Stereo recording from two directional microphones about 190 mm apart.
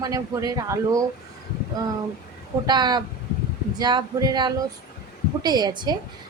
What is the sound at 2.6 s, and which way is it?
A woman's voice, 20° right (ahead or behind).